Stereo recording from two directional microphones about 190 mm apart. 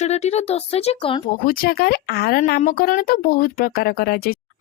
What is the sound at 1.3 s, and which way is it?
Speech, 50° left (ahead or behind).